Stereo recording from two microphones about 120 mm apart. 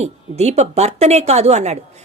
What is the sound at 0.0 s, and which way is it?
A woman's voice, 65° right (ahead or behind).